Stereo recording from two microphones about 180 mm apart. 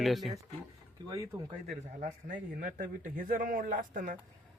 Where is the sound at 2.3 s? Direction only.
50° right (ahead or behind).